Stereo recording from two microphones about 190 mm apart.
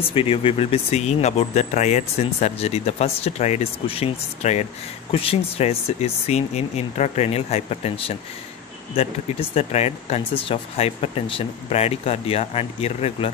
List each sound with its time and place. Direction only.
0.1 s speech: 30° left (ahead or behind)